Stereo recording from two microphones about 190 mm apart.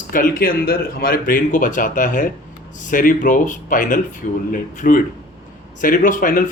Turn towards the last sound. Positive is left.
turn(degrees=45)  # may be behind; listen again after turning